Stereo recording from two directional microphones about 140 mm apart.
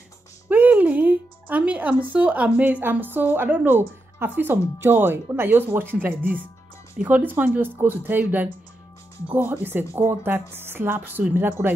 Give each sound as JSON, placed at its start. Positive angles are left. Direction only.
{"t": 0.5, "sound": "music", "side_deg": -10}
{"t": 2.1, "sound": "speech", "side_deg": -10}